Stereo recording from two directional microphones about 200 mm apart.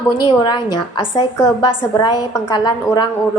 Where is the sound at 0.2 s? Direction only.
20° left (ahead or behind).